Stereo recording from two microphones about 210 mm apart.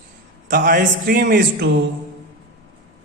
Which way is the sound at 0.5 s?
45° right (ahead or behind).